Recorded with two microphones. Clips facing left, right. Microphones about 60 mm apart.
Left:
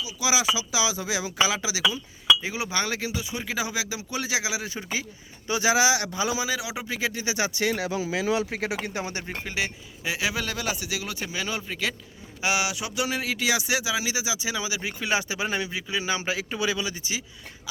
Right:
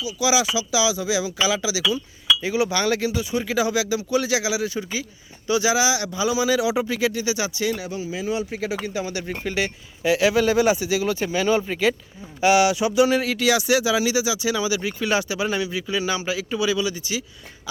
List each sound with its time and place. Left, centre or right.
0.0 s speech: left
2.4 s speech: centre; by 6.4 s left
6.6 s speech: centre
7.3 s speech: left
7.8 s speech: left
9.2 s speech: centre
10.4 s speech: centre
10.8 s speech: centre
12.4 s speech: centre; by 17.2 s left